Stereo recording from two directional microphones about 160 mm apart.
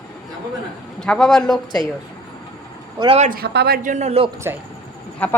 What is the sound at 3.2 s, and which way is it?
Speech, 70° right (ahead or behind).